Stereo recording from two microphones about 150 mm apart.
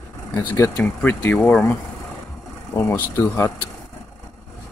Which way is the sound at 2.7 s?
15° left (ahead or behind).